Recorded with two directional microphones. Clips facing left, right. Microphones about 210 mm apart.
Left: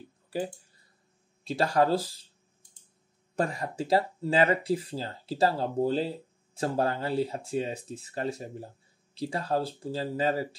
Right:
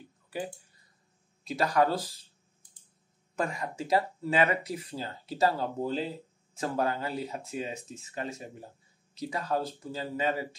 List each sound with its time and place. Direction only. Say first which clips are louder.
1.4 s speech: left 1 dB; 30° left (ahead or behind)
3.3 s speech: left 3 dB; 35° left (ahead or behind)